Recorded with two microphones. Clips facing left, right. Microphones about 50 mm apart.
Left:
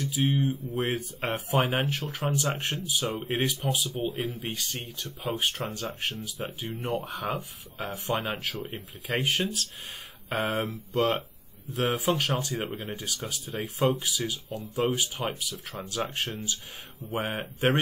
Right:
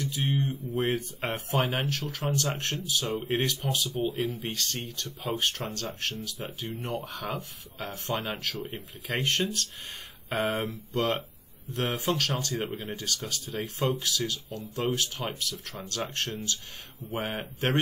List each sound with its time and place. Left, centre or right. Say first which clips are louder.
0.0 s speech: left 3 dB; centre
1.9 s speech: left 1 dB; centre
12.2 s speech: left 1 dB; centre